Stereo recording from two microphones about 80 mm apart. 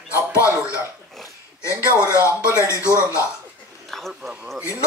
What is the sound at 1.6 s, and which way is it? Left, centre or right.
Music, left.